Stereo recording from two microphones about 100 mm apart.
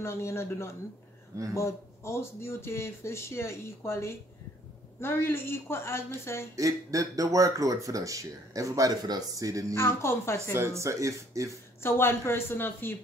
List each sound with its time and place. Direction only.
0.0 s speech: 30° left (ahead or behind)
6.5 s speech: 35° right (ahead or behind)
9.8 s speech: 25° left (ahead or behind)
10.5 s speech: 25° right (ahead or behind)
11.8 s speech: 25° left (ahead or behind)